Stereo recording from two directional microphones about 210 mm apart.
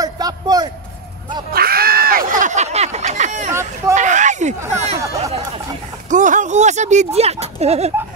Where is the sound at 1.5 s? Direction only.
45° right (ahead or behind).